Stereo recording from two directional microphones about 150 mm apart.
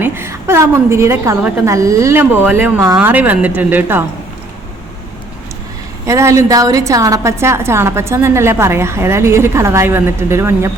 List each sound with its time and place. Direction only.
0.0 s a woman's voice: 15° right (ahead or behind)
6.1 s a woman's voice: 20° right (ahead or behind)